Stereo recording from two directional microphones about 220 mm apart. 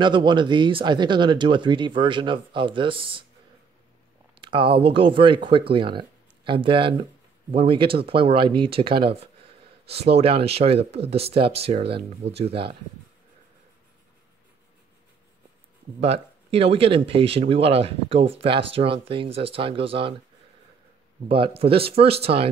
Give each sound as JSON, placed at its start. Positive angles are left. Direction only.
{"t": 0.0, "sound": "speech", "side_deg": -20}
{"t": 4.4, "sound": "speech", "side_deg": -25}
{"t": 16.0, "sound": "speech", "side_deg": -25}
{"t": 21.3, "sound": "speech", "side_deg": -25}